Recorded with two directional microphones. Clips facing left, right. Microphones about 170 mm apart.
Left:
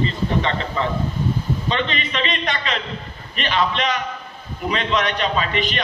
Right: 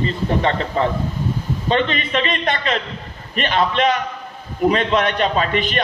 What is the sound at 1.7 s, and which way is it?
A man's voice, 50° right (ahead or behind).